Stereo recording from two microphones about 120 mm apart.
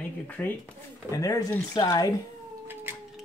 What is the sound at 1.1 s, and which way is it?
Speech, 30° left (ahead or behind).